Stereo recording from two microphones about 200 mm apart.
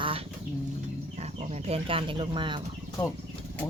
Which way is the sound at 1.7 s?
25° right (ahead or behind).